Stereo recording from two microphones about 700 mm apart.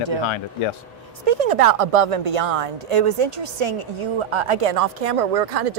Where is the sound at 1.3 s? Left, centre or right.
Right.